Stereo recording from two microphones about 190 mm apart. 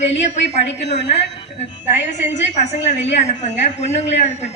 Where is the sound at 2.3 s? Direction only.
35° left (ahead or behind).